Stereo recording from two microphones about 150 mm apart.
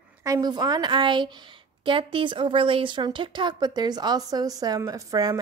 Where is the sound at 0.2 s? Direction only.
25° right (ahead or behind).